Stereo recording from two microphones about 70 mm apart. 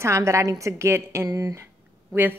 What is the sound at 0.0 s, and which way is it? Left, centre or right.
A woman's voice, right.